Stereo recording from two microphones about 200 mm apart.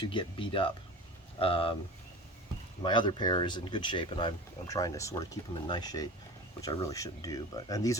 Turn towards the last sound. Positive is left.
turn(degrees=15)  # may be behind; listen again after turning